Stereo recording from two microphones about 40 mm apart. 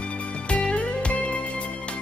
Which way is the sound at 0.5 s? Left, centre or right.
Left.